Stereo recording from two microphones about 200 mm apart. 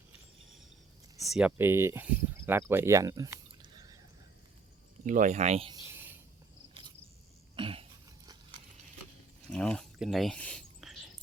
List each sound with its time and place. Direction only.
1.3 s speech: 5° right (ahead or behind)
5.0 s speech: 40° right (ahead or behind)
7.5 s cough: 25° right (ahead or behind)
9.5 s speech: 5° left (ahead or behind)